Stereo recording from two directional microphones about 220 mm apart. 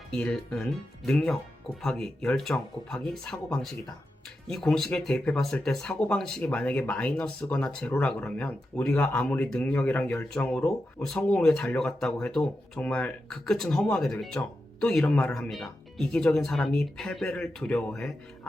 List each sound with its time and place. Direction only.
0.1 s speech: 5° left (ahead or behind)